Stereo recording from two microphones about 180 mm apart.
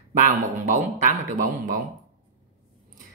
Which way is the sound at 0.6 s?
45° right (ahead or behind).